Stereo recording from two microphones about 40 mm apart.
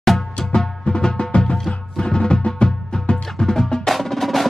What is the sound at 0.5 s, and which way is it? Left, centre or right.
Music, left.